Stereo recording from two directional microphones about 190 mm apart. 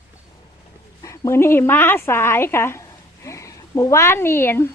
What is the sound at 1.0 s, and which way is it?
Speech, 15° left (ahead or behind).